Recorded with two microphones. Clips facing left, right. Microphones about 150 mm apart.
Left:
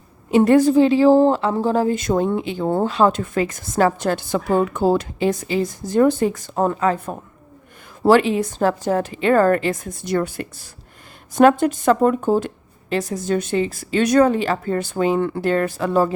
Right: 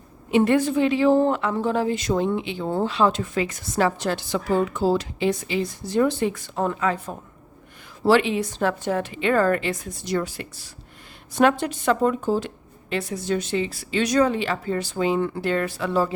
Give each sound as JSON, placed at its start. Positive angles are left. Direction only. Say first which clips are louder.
{"t": 0.3, "sound": "a woman's voice", "louder": "left 5 dB", "side_deg": 40}
{"t": 8.0, "sound": "a woman's voice", "louder": "left 4 dB", "side_deg": 45}
{"t": 12.9, "sound": "a woman's voice", "louder": "left 4 dB", "side_deg": 40}